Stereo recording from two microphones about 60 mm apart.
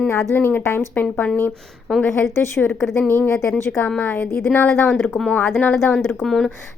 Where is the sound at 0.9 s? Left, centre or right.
Left.